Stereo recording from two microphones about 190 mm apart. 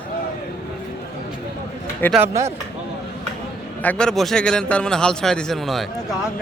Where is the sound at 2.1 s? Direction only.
15° right (ahead or behind).